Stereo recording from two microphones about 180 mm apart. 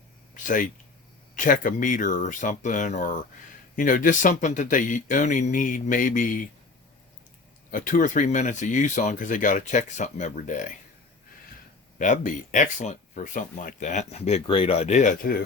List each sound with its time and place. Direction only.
0.4 s speech: 45° left (ahead or behind)
7.7 s speech: 50° left (ahead or behind)
11.9 s speech: 45° left (ahead or behind)